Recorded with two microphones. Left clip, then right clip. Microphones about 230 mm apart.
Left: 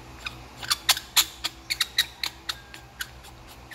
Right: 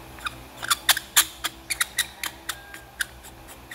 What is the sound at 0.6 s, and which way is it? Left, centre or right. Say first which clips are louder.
Mouse: right 2 dB; centre.